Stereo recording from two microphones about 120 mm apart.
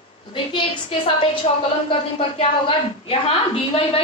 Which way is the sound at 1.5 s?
50° left (ahead or behind).